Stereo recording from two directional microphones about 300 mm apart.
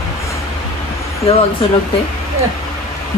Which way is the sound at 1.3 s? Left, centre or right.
Centre.